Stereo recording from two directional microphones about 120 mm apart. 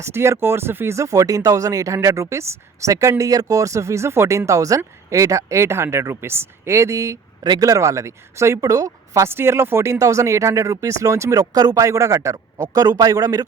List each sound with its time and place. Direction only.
0.0 s speech: 20° right (ahead or behind)